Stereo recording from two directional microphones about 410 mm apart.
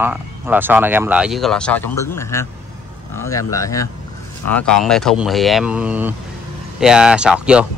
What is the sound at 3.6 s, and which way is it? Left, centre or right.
A man's voice, centre.